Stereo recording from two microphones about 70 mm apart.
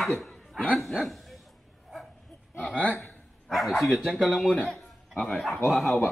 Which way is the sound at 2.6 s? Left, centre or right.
Centre.